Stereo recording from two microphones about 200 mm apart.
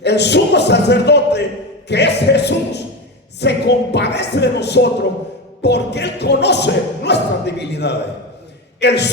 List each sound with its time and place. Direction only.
0.0 s music: 60° left (ahead or behind)